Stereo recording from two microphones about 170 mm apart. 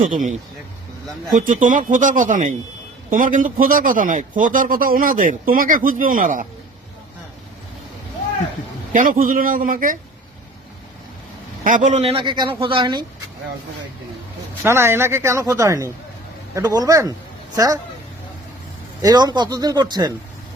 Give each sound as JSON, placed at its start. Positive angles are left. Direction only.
{"t": 1.4, "sound": "speech", "side_deg": -50}
{"t": 8.9, "sound": "a man's voice", "side_deg": -55}
{"t": 11.6, "sound": "speech", "side_deg": -50}
{"t": 14.6, "sound": "speech", "side_deg": -15}
{"t": 19.0, "sound": "speech", "side_deg": -25}